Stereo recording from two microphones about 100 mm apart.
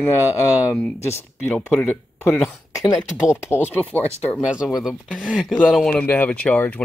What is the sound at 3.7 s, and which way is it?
Speech, 15° left (ahead or behind).